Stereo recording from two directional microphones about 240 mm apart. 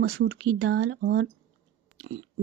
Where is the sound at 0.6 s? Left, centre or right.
Right.